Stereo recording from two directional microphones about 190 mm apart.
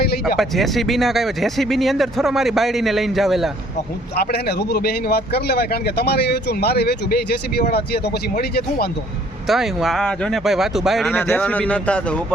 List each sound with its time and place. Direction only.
0.0 s a sound: 55° left (ahead or behind)
0.3 s speech: centre (ahead or behind)
4.1 s speech: 55° left (ahead or behind)
9.5 s speech: centre (ahead or behind)